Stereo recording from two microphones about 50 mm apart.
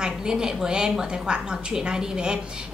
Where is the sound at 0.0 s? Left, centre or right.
Centre.